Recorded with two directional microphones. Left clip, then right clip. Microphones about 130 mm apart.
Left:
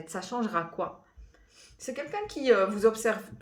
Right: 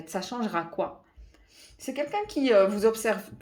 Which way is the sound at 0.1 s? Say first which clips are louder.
Right 1 dB; 45° right (ahead or behind).